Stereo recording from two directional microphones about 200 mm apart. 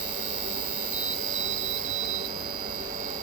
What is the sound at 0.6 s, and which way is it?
Jet engine, 40° right (ahead or behind).